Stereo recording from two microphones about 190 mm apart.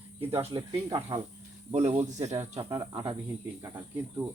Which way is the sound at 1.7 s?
35° right (ahead or behind).